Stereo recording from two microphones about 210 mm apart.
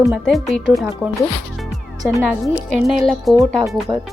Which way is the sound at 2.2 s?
Centre (ahead or behind).